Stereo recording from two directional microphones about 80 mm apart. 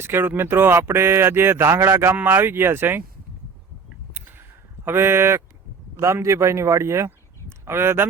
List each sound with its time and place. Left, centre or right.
0.0 s speech: right
4.1 s a sound: right
4.9 s a man's voice: right